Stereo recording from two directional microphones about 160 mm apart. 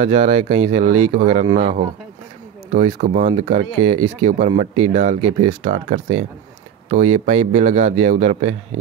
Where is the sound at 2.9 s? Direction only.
50° right (ahead or behind).